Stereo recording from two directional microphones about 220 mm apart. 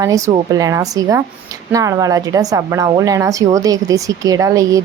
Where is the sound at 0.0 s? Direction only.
15° right (ahead or behind).